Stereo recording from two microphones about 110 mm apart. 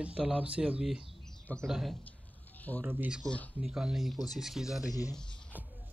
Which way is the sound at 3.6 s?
5° right (ahead or behind).